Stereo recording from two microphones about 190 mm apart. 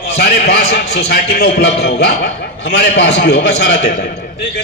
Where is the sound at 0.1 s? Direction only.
60° left (ahead or behind).